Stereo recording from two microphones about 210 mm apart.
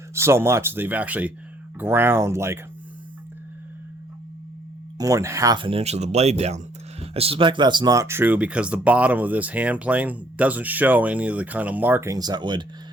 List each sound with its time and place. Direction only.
0.1 s speech: 10° right (ahead or behind)
4.9 s speech: 15° right (ahead or behind)